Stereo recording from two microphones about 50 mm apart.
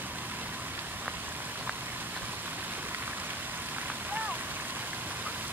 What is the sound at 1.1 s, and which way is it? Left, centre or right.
Rain, right.